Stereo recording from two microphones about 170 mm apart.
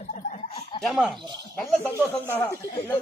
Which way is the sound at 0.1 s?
45° left (ahead or behind).